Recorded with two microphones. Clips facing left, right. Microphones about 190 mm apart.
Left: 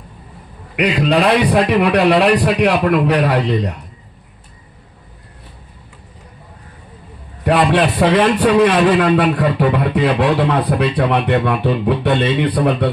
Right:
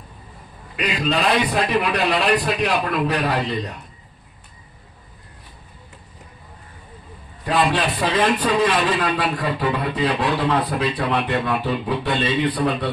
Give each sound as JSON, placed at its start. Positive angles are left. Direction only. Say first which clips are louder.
{"t": 1.2, "sound": "a man's voice", "louder": "left 6 dB", "side_deg": 70}
{"t": 7.4, "sound": "a man's voice", "louder": "left 6 dB", "side_deg": 70}
{"t": 12.3, "sound": "speech", "louder": "left 5 dB", "side_deg": 50}